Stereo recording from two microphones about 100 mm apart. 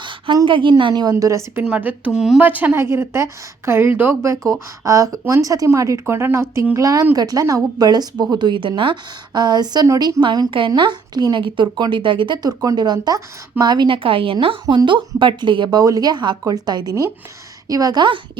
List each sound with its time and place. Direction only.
0.4 s a woman's voice: 55° right (ahead or behind)
1.1 s a woman's voice: 30° right (ahead or behind)
1.6 s speech: 15° right (ahead or behind)
2.1 s speech: 5° right (ahead or behind)
2.4 s a woman's voice: 15° right (ahead or behind); by 15.8 s 50° right (ahead or behind)
15.8 s a woman's voice: 40° right (ahead or behind)